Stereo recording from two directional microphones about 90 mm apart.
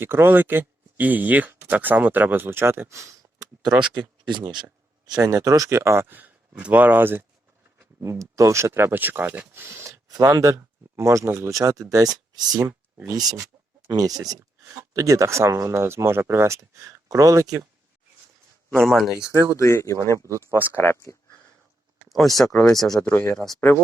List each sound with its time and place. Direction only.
0.0 s speech: 25° right (ahead or behind)
3.8 s speech: 65° right (ahead or behind); by 7.3 s 25° right (ahead or behind)
8.0 s speech: 35° right (ahead or behind)
10.1 s speech: 40° right (ahead or behind)
18.7 s speech: 5° left (ahead or behind)
19.3 s speech: 35° right (ahead or behind)
19.5 s speech: 30° left (ahead or behind)
22.1 s speech: centre (ahead or behind)
23.0 s speech: 30° left (ahead or behind)